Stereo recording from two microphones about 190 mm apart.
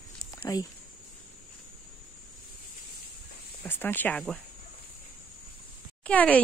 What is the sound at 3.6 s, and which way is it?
Speech, 10° left (ahead or behind).